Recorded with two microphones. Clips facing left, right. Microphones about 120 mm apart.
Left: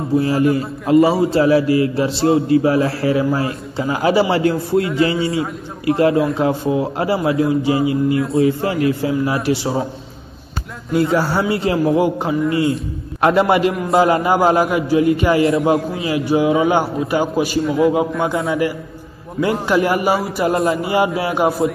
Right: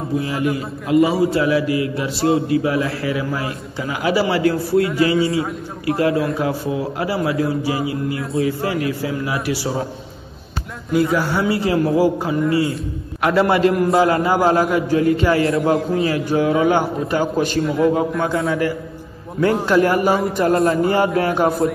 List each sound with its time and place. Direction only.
0.2 s a man's voice: 35° left (ahead or behind)
10.9 s a man's voice: 30° left (ahead or behind); by 21.7 s centre (ahead or behind)